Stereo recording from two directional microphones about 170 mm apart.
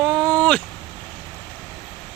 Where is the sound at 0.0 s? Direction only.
5° left (ahead or behind).